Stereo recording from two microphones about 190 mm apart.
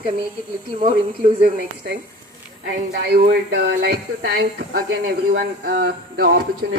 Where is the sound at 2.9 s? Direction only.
60° right (ahead or behind).